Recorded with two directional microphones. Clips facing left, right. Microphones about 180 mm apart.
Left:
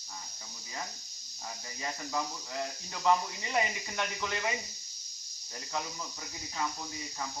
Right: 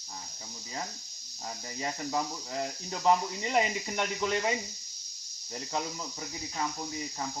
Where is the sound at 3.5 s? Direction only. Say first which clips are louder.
Right 3 dB; 25° right (ahead or behind).